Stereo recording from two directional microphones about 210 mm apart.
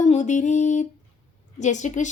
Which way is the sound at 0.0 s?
35° left (ahead or behind).